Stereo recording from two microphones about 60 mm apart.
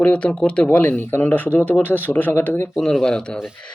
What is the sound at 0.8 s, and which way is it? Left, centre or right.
Speech, left.